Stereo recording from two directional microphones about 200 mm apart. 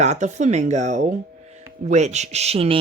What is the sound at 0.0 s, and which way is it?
A woman's voice, 35° right (ahead or behind).